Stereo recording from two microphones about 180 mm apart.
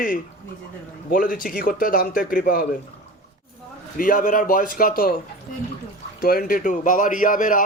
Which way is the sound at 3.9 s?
50° left (ahead or behind).